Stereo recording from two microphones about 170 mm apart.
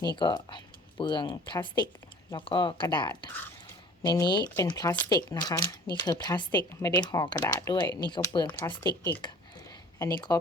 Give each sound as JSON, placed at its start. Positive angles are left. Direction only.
{"t": 0.2, "sound": "speech", "side_deg": 25}
{"t": 10.0, "sound": "speech", "side_deg": 25}